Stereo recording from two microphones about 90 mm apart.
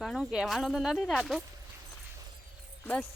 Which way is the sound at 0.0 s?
Centre (ahead or behind).